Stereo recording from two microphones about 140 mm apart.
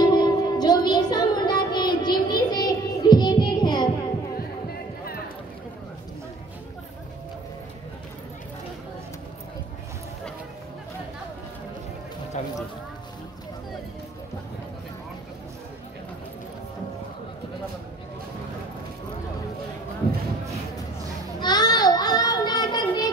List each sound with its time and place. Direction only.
0.0 s music: 30° left (ahead or behind)
12.4 s a sound: 55° left (ahead or behind)
21.4 s child singing: 30° left (ahead or behind)